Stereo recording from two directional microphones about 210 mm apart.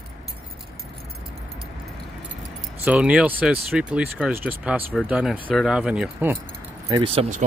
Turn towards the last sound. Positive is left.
turn(degrees=-30)  # may be behind; listen again after turning